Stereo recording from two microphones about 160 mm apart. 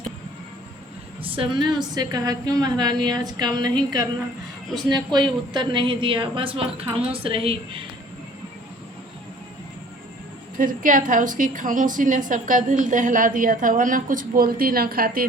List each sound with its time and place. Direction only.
1.2 s a woman's voice: 35° right (ahead or behind)
4.7 s a woman's voice: 25° right (ahead or behind)
10.6 s a woman's voice: 55° right (ahead or behind)